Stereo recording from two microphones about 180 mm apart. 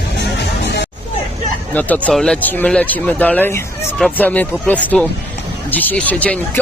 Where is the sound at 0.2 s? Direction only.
70° left (ahead or behind).